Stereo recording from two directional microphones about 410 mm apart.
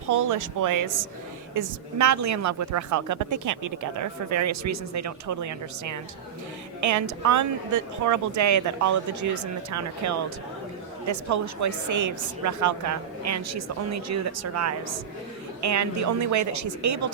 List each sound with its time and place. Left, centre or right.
0.1 s a woman's voice: right